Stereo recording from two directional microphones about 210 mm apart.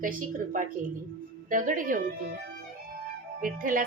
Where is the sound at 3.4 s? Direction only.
40° right (ahead or behind).